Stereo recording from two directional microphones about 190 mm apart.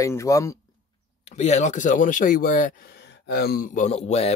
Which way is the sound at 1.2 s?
35° left (ahead or behind).